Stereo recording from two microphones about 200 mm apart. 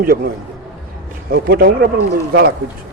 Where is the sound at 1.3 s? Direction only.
50° right (ahead or behind).